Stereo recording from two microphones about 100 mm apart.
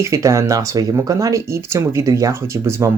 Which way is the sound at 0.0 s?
30° right (ahead or behind).